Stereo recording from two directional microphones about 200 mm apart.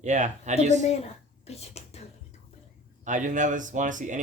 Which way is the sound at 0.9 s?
30° left (ahead or behind).